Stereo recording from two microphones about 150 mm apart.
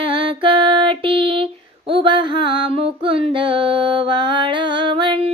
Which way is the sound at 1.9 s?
35° right (ahead or behind).